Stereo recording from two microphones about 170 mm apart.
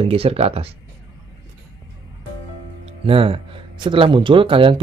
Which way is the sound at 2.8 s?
35° right (ahead or behind).